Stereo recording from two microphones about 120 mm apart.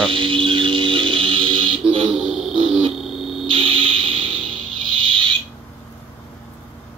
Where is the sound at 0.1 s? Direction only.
45° right (ahead or behind).